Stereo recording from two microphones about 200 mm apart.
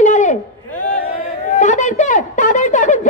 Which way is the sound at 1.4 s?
40° left (ahead or behind).